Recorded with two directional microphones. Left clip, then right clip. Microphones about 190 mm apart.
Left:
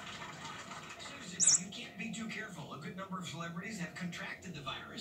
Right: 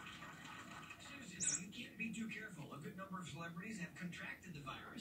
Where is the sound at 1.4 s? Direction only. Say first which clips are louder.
Left 13 dB; 15° left (ahead or behind).